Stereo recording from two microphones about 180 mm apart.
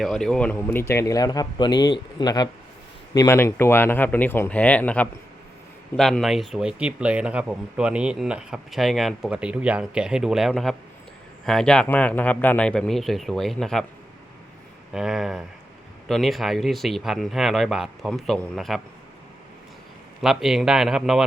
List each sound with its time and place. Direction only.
0.0 s speech: centre (ahead or behind)
14.9 s speech: centre (ahead or behind)
20.2 s speech: centre (ahead or behind)